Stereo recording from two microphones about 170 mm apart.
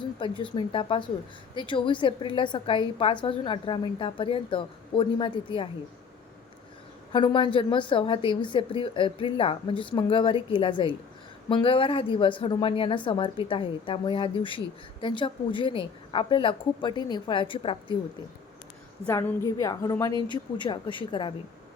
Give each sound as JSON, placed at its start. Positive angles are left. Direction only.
{"t": 0.0, "sound": "a woman's voice", "side_deg": 30}
{"t": 7.1, "sound": "a woman's voice", "side_deg": 30}
{"t": 19.0, "sound": "a woman's voice", "side_deg": 15}